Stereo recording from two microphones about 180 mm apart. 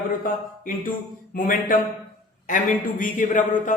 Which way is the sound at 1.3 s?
50° left (ahead or behind).